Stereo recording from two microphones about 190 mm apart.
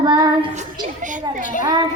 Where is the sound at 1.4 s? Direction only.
45° left (ahead or behind).